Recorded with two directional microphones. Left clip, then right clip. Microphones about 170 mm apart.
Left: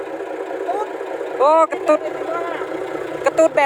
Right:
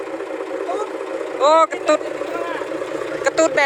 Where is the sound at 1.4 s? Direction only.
30° left (ahead or behind).